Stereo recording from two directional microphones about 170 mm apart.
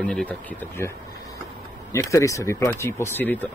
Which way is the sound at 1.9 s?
20° left (ahead or behind).